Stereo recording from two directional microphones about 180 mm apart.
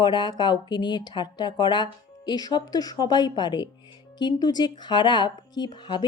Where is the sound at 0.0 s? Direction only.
25° left (ahead or behind).